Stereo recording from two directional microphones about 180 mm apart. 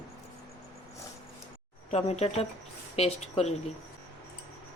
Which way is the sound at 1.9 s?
35° left (ahead or behind).